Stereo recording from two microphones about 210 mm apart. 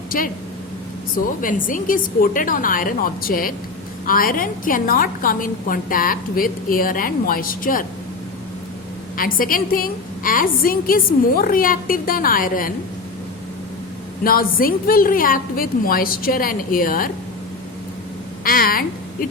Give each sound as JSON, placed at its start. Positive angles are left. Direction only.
{"t": 0.1, "sound": "a woman's voice", "side_deg": 40}
{"t": 1.4, "sound": "a woman's voice", "side_deg": 40}
{"t": 9.1, "sound": "a woman's voice", "side_deg": 40}
{"t": 14.3, "sound": "a woman's voice", "side_deg": 45}
{"t": 18.4, "sound": "a woman's voice", "side_deg": 45}